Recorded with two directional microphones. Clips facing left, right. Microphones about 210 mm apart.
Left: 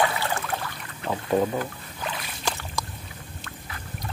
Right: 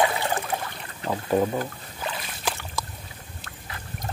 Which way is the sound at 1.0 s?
5° right (ahead or behind).